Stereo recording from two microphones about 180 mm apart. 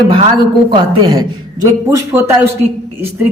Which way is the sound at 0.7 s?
20° right (ahead or behind).